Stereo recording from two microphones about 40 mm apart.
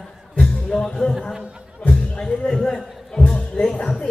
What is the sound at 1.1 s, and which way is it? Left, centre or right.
Chatter, centre.